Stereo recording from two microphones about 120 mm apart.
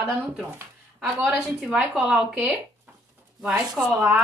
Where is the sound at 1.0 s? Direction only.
5° right (ahead or behind).